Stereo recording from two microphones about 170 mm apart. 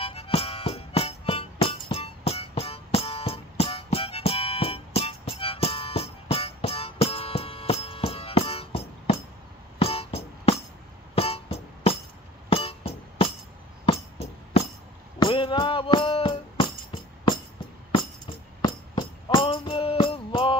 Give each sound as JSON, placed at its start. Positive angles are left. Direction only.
{"t": 0.0, "sound": "music", "side_deg": 35}
{"t": 18.6, "sound": "music", "side_deg": 30}